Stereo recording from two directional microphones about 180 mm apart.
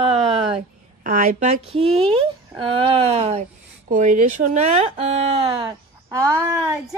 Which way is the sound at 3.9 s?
45° right (ahead or behind).